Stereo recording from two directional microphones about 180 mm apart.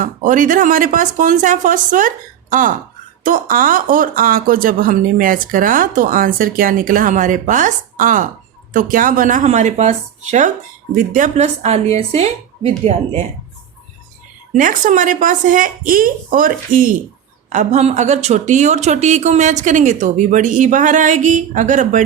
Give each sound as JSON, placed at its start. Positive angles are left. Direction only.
{"t": 0.0, "sound": "speech", "side_deg": -45}
{"t": 10.9, "sound": "a woman's voice", "side_deg": -45}
{"t": 14.5, "sound": "speech", "side_deg": -45}